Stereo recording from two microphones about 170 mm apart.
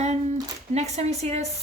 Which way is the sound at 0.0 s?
40° right (ahead or behind).